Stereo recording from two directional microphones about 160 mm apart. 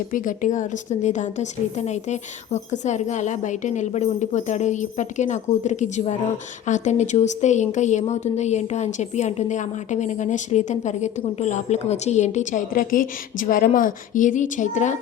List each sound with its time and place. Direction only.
0.1 s a woman's voice: 55° left (ahead or behind)